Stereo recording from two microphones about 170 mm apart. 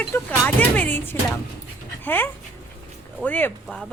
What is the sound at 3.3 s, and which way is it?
Speech, 10° left (ahead or behind).